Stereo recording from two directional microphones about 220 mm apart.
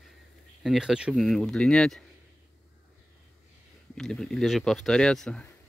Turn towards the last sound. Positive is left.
turn(degrees=5)  # may be behind; listen again after turning